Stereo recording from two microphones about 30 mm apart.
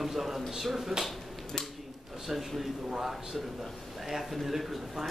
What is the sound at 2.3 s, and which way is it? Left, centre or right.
A man's voice, centre.